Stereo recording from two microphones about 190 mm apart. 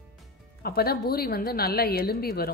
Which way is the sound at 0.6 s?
55° left (ahead or behind).